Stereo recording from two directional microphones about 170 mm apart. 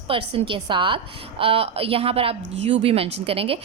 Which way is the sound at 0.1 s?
30° right (ahead or behind).